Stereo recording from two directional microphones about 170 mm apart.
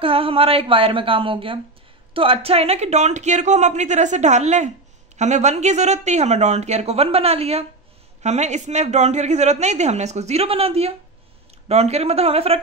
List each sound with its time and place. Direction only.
0.0 s a man's voice: 35° right (ahead or behind)